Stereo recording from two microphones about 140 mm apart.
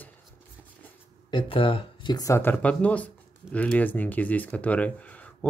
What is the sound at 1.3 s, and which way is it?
Speech, 40° left (ahead or behind).